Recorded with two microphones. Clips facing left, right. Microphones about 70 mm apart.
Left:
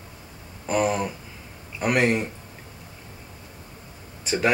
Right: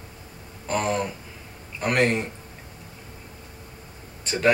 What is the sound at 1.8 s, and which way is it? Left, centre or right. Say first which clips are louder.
Speech: left 1 dB; centre.